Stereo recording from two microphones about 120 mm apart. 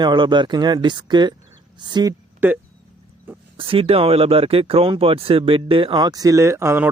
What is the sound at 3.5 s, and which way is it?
A man's voice, 50° right (ahead or behind).